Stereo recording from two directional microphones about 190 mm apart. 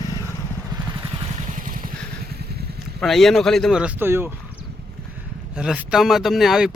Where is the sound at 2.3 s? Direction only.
55° right (ahead or behind).